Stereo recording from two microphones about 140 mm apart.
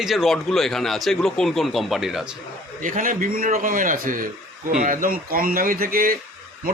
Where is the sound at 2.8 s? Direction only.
75° right (ahead or behind).